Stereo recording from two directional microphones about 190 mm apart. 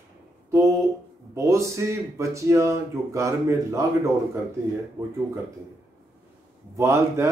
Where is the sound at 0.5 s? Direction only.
15° right (ahead or behind).